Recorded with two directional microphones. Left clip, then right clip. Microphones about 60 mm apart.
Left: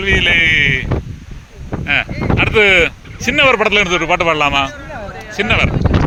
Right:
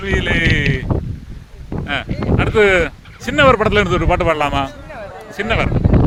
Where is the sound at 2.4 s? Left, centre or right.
Right.